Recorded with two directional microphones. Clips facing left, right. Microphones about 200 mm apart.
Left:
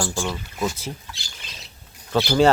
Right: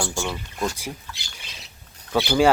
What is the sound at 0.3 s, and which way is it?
Speech, 5° left (ahead or behind).